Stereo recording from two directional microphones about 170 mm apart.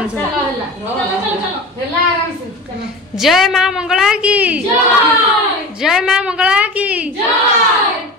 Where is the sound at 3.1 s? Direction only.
Centre (ahead or behind).